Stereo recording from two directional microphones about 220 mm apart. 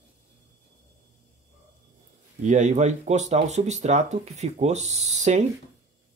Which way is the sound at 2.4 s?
35° right (ahead or behind).